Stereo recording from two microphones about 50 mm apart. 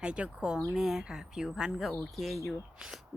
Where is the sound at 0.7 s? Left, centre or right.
Centre.